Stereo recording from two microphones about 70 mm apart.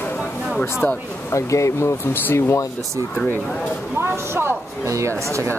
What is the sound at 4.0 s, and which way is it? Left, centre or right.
Speech, right.